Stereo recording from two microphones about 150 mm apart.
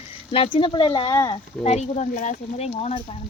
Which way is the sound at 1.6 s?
45° left (ahead or behind).